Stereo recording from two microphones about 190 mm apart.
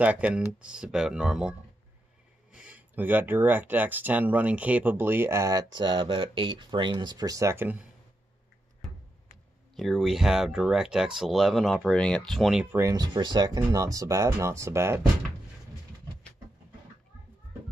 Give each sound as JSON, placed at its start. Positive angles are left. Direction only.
{"t": 0.0, "sound": "speech", "side_deg": -5}
{"t": 2.5, "sound": "speech", "side_deg": -5}
{"t": 9.8, "sound": "speech", "side_deg": 0}
{"t": 12.7, "sound": "speech", "side_deg": -20}